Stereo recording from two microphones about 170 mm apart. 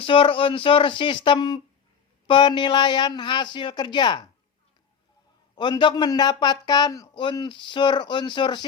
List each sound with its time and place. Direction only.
0.0 s speech: 30° left (ahead or behind)
5.5 s speech: 25° left (ahead or behind)